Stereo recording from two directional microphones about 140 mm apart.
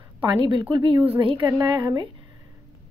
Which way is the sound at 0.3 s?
35° right (ahead or behind).